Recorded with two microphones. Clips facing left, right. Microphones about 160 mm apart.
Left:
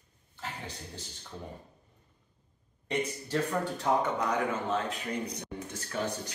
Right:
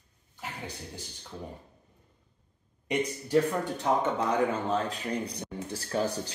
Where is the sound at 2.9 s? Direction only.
15° right (ahead or behind).